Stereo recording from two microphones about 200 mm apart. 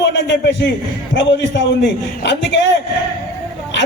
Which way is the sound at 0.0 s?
60° left (ahead or behind).